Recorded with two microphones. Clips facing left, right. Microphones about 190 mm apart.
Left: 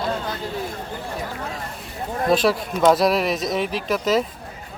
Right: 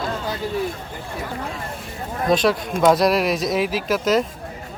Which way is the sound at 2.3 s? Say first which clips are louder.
Right 1 dB; 5° left (ahead or behind).